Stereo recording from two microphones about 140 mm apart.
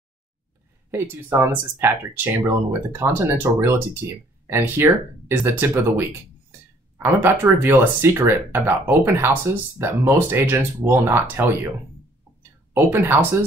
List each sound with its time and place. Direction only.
0.9 s speech: 15° right (ahead or behind)
12.7 s speech: 15° right (ahead or behind)